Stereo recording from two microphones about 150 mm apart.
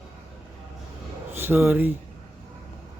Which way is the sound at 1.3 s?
15° right (ahead or behind).